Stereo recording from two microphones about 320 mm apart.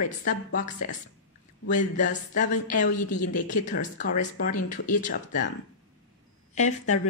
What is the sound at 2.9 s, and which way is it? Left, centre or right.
Speech, left.